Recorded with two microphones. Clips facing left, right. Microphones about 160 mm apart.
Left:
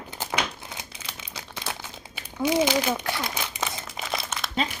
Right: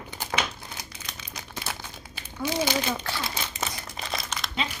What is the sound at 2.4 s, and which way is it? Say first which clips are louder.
Crumpling: left 4 dB; 25° left (ahead or behind).